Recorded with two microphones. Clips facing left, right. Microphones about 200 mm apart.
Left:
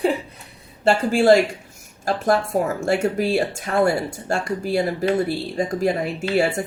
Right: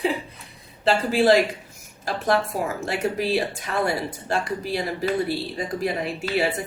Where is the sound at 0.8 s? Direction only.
50° left (ahead or behind).